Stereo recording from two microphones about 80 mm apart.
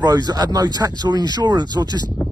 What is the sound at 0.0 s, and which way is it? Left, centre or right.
Speech, right.